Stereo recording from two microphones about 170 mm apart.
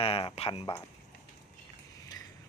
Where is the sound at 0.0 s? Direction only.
35° left (ahead or behind).